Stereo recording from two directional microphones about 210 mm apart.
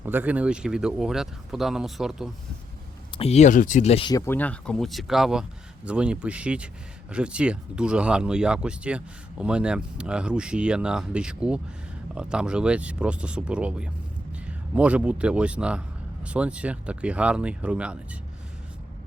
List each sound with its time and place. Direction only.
0.0 s speech: 10° right (ahead or behind)
3.2 s speech: 30° left (ahead or behind)
4.3 s speech: 5° left (ahead or behind)